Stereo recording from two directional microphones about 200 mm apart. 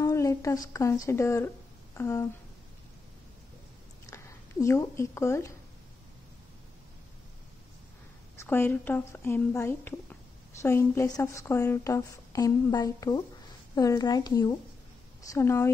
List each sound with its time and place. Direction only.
0.0 s a woman's voice: 15° left (ahead or behind)
4.1 s speech: 15° left (ahead or behind)
8.4 s a woman's voice: 10° left (ahead or behind)